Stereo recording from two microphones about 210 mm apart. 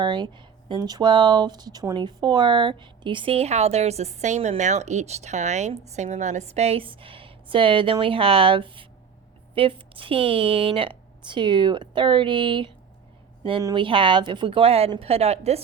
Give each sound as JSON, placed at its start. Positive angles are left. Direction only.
{"t": 0.0, "sound": "speech", "side_deg": -20}